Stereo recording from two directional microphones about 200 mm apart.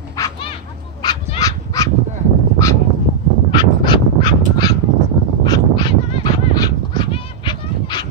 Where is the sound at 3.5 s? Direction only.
25° left (ahead or behind).